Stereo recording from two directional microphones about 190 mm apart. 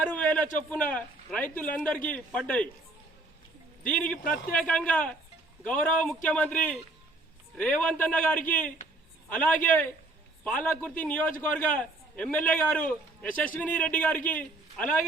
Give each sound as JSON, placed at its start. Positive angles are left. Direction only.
{"t": 0.1, "sound": "a man's voice", "side_deg": 10}
{"t": 3.8, "sound": "a man's voice", "side_deg": 5}